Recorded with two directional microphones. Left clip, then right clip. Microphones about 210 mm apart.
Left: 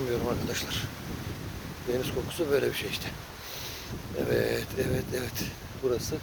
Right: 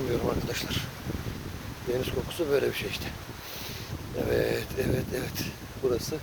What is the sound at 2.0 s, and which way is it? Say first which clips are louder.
Speech: right 1 dB; 10° left (ahead or behind).